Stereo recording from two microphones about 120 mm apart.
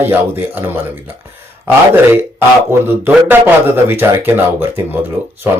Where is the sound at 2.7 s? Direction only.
20° right (ahead or behind).